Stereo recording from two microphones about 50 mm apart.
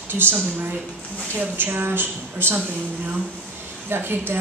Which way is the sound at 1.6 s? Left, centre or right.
Right.